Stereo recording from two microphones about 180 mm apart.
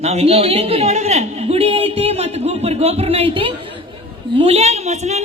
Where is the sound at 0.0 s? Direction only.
35° right (ahead or behind).